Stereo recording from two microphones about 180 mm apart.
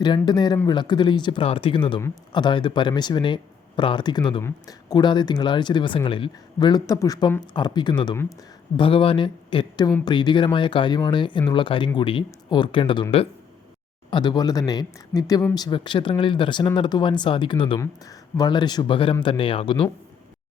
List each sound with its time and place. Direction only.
0.3 s speech: 25° left (ahead or behind)